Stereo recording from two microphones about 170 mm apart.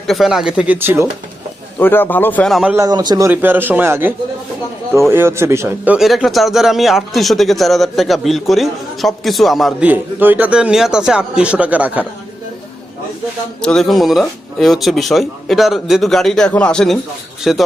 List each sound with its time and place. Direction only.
0.1 s speech: centre (ahead or behind)
1.8 s a man's voice: 10° left (ahead or behind)
2.7 s speech: 20° right (ahead or behind)
3.2 s a man's voice: 10° right (ahead or behind)
13.6 s a man's voice: 5° left (ahead or behind)